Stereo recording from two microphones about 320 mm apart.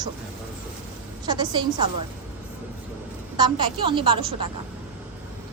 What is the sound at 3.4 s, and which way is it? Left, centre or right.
Speech, centre.